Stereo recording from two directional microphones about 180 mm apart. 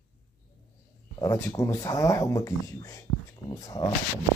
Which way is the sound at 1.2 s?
20° left (ahead or behind).